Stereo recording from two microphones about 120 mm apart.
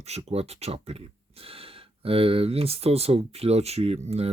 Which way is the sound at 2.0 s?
50° right (ahead or behind).